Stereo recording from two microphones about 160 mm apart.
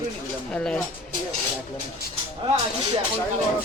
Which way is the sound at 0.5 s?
5° left (ahead or behind).